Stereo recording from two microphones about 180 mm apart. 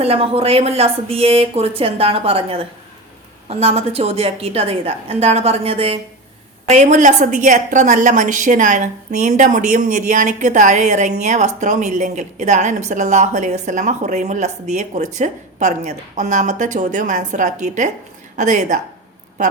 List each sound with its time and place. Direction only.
0.0 s a woman's voice: 35° right (ahead or behind)